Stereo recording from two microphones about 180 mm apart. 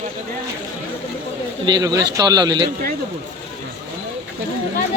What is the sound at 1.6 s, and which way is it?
Speech, 25° right (ahead or behind).